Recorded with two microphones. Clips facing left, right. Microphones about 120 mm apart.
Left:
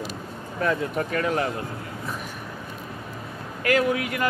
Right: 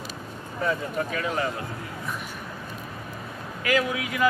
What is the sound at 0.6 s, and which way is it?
Speech, 60° left (ahead or behind).